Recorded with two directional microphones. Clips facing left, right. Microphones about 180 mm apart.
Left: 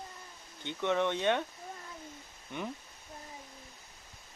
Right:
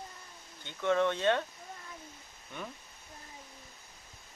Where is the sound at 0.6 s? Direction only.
20° left (ahead or behind).